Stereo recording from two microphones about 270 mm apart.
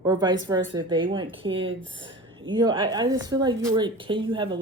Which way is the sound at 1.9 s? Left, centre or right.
Centre.